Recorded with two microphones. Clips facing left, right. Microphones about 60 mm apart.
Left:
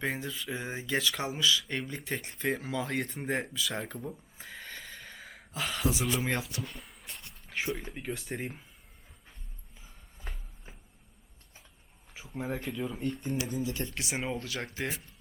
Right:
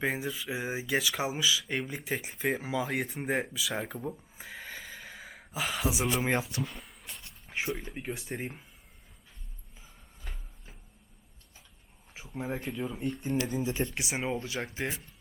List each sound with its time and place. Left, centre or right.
0.0 s speech: centre
6.7 s writing: centre
7.5 s speech: centre
12.1 s speech: centre
13.4 s speech: right